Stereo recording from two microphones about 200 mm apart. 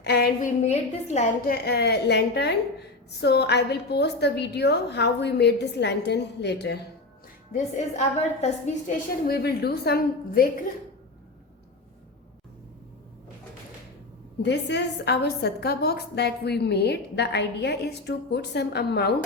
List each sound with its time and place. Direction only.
0.0 s a woman's voice: 50° left (ahead or behind)
0.6 s a woman's voice: 35° left (ahead or behind)
1.6 s a woman's voice: 55° left (ahead or behind)
7.5 s a woman's voice: 35° left (ahead or behind)
9.2 s a woman's voice: 50° left (ahead or behind)
14.4 s a woman's voice: 60° left (ahead or behind)